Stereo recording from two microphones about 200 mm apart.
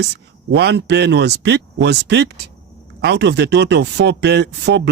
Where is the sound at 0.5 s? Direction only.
55° right (ahead or behind).